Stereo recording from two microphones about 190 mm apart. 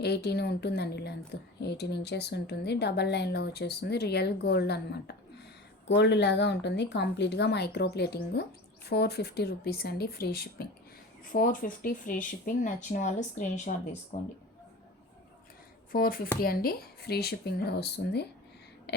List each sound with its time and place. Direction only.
0.0 s a woman's voice: 60° left (ahead or behind); by 14.2 s 40° left (ahead or behind)
15.9 s a woman's voice: 50° left (ahead or behind)
18.9 s a sound: 60° left (ahead or behind)